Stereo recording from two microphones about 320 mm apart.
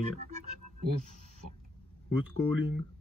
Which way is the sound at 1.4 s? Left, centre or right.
Right.